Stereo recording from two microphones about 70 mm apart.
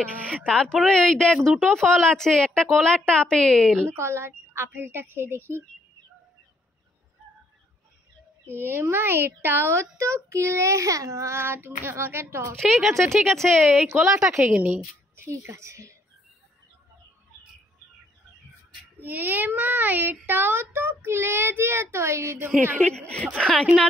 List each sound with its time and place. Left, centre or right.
0.5 s speech: centre
3.8 s a child's voice: right
8.5 s a child's voice: right
12.5 s a woman's voice: centre
13.8 s a child's voice: right
18.9 s a child's voice: right
22.8 s speech: centre